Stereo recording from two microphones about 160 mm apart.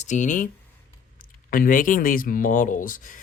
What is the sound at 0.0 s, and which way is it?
Speech, 50° left (ahead or behind).